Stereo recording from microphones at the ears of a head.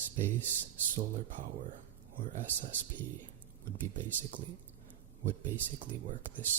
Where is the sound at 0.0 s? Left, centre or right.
Right.